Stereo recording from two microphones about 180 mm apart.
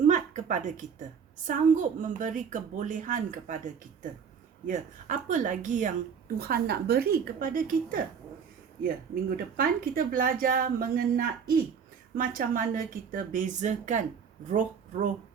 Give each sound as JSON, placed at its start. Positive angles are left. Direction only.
{"t": 0.0, "sound": "a sound", "side_deg": -45}
{"t": 1.5, "sound": "a woman's voice", "side_deg": -45}
{"t": 4.6, "sound": "a woman's voice", "side_deg": -45}
{"t": 9.3, "sound": "a woman's voice", "side_deg": -55}